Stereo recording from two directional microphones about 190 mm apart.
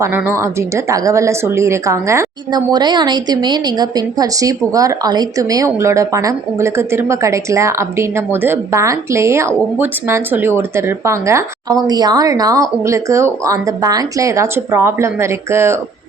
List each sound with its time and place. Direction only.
0.0 s speech: 10° right (ahead or behind)